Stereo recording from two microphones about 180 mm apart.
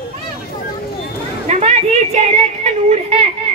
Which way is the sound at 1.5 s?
40° right (ahead or behind).